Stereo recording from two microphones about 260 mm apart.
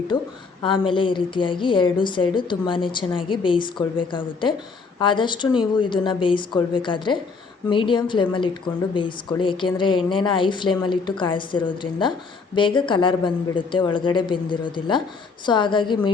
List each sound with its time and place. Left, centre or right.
0.6 s a woman's voice: centre